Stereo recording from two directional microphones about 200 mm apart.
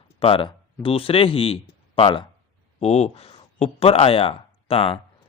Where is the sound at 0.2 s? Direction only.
25° left (ahead or behind).